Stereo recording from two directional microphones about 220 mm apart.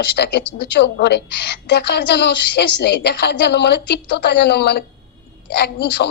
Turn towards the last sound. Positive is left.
turn(degrees=50)  # may be behind; listen again after turning